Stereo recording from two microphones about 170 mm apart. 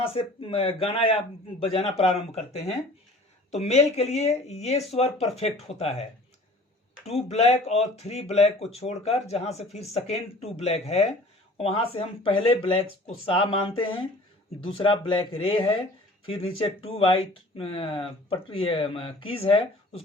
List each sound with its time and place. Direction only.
0.0 s speech: 35° left (ahead or behind)
7.1 s speech: 40° left (ahead or behind)